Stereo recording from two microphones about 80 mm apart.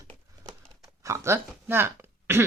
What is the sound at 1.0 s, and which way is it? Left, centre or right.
Speech, right.